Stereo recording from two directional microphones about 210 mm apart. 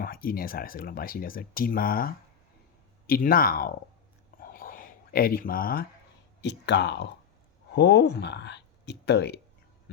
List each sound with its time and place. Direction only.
0.0 s speech: 45° left (ahead or behind)
4.5 s a sound: 40° left (ahead or behind)
6.4 s speech: 55° left (ahead or behind)